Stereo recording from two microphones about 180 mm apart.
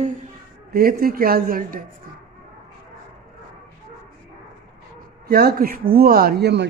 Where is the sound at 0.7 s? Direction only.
55° right (ahead or behind).